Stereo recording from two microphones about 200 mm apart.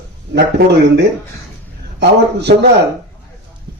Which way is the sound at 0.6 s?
50° right (ahead or behind).